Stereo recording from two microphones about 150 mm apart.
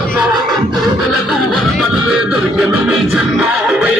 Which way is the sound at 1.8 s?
5° right (ahead or behind).